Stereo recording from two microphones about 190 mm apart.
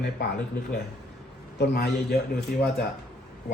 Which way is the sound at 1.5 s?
60° left (ahead or behind).